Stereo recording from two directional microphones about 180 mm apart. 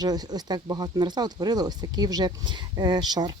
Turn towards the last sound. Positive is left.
turn(degrees=-20)  # may be behind; listen again after turning